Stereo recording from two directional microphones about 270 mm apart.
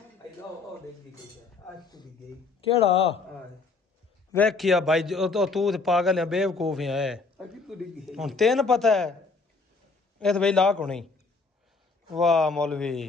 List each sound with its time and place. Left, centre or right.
1.8 s speech: centre
4.3 s a man's voice: centre
10.2 s a man's voice: centre
12.1 s a man's voice: centre